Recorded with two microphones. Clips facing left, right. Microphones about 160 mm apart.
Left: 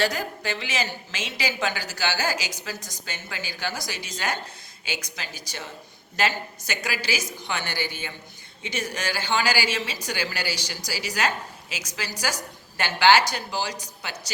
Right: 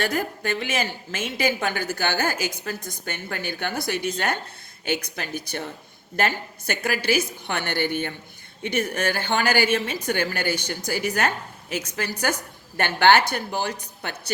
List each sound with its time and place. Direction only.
0.0 s a woman's voice: 50° right (ahead or behind)